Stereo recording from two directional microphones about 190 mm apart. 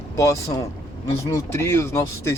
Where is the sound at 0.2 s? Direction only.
15° left (ahead or behind).